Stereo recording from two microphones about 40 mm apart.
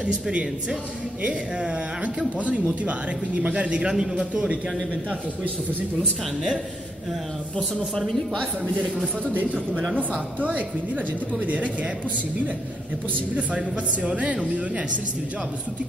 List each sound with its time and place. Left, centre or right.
0.0 s speech: right
1.7 s a woman's voice: right
3.9 s a man's voice: centre
8.1 s a man's voice: centre
9.2 s a woman's voice: right
13.3 s a woman's voice: right